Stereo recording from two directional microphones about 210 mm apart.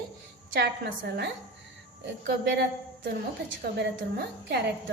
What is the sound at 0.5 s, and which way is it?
Speech, 50° right (ahead or behind).